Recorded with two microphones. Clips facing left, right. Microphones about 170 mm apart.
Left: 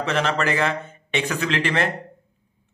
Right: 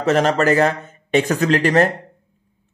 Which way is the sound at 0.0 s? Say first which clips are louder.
Right 7 dB; 40° right (ahead or behind).